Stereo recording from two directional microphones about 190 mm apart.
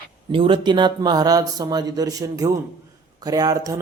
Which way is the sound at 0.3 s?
25° right (ahead or behind).